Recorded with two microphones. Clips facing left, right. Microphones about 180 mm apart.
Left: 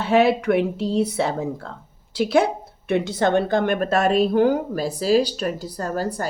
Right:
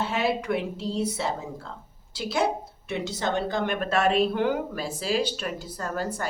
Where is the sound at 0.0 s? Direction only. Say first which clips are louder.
Left 9 dB; 60° left (ahead or behind).